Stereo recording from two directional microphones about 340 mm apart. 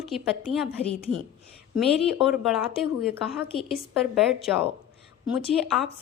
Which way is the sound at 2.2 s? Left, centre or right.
Centre.